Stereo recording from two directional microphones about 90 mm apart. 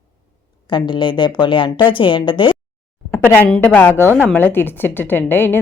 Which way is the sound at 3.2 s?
20° left (ahead or behind).